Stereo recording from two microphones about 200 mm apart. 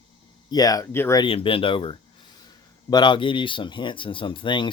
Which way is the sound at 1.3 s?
25° left (ahead or behind).